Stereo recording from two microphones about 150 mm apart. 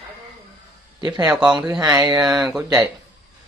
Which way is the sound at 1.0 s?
25° right (ahead or behind).